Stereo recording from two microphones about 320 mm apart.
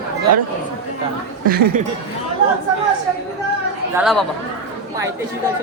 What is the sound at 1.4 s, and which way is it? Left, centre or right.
Speech, right.